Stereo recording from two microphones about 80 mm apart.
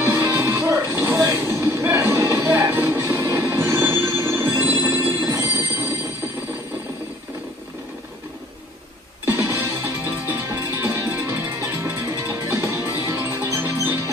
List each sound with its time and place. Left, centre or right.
0.0 s music: right
4.8 s train: right
5.3 s music: right
9.2 s music: right